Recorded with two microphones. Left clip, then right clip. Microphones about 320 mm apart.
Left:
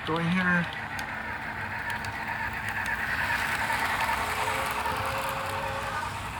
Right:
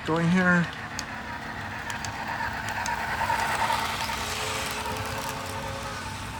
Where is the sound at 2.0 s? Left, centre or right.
Centre.